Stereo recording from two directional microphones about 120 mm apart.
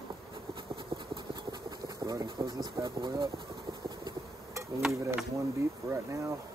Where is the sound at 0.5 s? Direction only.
45° right (ahead or behind).